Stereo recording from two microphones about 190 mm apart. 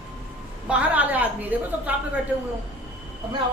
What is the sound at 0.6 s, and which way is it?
A woman's voice, 10° right (ahead or behind).